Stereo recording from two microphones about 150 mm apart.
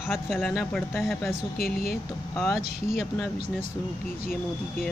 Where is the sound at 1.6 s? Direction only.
90° left.